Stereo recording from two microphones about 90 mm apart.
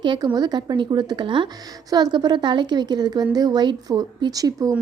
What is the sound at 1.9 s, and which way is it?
A woman's voice, 45° right (ahead or behind).